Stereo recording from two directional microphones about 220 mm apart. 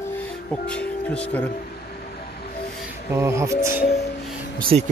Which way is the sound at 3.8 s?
45° left (ahead or behind).